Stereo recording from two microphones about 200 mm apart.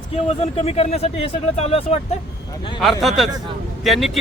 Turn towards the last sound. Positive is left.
turn(degrees=0)  # may be behind; listen again after turning